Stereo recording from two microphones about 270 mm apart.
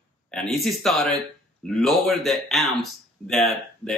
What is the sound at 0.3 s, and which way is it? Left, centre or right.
Speech, centre.